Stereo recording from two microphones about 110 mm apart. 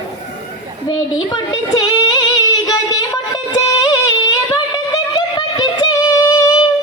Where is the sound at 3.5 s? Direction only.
35° left (ahead or behind).